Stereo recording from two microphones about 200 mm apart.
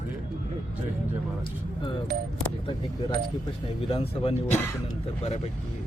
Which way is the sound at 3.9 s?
30° left (ahead or behind).